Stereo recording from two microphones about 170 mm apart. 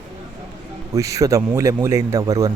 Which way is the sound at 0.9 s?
20° right (ahead or behind).